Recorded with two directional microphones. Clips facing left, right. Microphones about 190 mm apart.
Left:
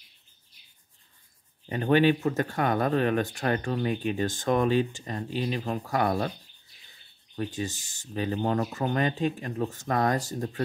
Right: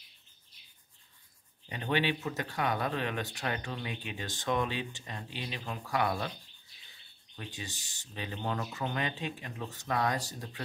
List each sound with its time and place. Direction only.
1.7 s speech: 45° left (ahead or behind)
7.3 s speech: 45° left (ahead or behind)